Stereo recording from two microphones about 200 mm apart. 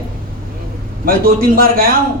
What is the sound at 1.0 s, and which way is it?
Speech, 45° right (ahead or behind).